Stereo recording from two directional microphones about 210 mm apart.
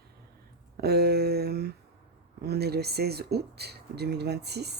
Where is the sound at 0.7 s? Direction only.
50° right (ahead or behind).